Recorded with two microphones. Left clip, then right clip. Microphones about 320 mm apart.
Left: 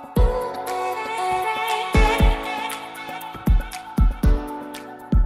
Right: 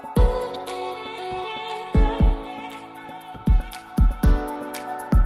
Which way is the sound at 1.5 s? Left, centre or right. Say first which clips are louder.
Left 6 dB; left.